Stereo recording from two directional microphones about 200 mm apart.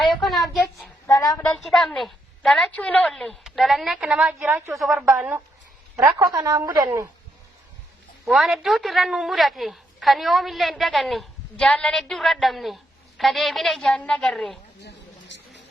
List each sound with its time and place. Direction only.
0.1 s a child's voice: centre (ahead or behind)
1.0 s a woman's voice: 15° left (ahead or behind)
1.4 s a woman's voice: centre (ahead or behind)
4.7 s a woman's voice: centre (ahead or behind)
6.3 s speech: 15° right (ahead or behind)
8.2 s a woman's voice: centre (ahead or behind)
14.8 s a sound: 60° left (ahead or behind)